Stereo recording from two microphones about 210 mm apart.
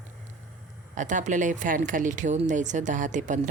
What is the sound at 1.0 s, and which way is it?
Speech, 35° right (ahead or behind).